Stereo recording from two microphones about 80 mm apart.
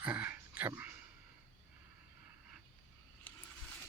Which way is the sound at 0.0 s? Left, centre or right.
Centre.